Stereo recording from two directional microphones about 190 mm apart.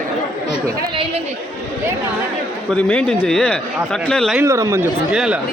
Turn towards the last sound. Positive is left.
turn(degrees=-5)  # may be behind; listen again after turning